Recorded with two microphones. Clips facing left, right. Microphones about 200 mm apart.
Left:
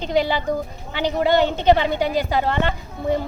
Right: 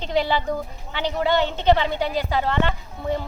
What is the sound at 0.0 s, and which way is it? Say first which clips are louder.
A woman's voice: left 2 dB; 15° left (ahead or behind).